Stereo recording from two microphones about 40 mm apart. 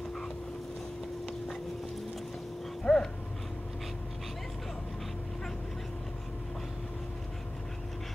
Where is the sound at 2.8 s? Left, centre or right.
Centre.